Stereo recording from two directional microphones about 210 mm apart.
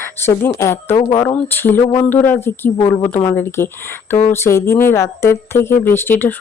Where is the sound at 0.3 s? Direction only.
10° left (ahead or behind).